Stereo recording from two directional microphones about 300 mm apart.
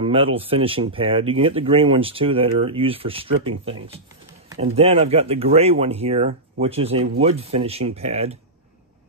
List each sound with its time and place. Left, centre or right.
0.0 s speech: centre